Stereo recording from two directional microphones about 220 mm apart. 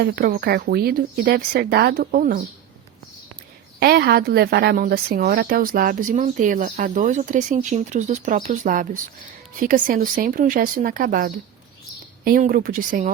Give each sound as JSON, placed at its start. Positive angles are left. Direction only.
{"t": 0.0, "sound": "speech", "side_deg": -45}
{"t": 3.8, "sound": "a woman's voice", "side_deg": -45}